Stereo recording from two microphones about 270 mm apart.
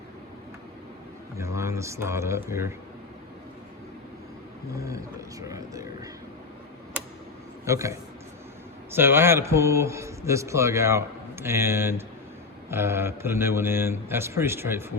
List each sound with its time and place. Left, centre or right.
1.4 s speech: centre
4.7 s a man's voice: centre
7.6 s a man's voice: centre